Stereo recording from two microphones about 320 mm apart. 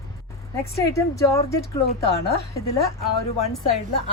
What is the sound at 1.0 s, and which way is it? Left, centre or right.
Speech, centre.